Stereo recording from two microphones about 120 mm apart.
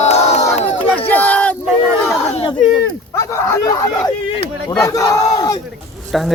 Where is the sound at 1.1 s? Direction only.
15° left (ahead or behind).